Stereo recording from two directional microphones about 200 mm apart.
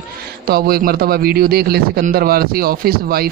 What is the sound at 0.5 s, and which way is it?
A man's voice, 50° right (ahead or behind).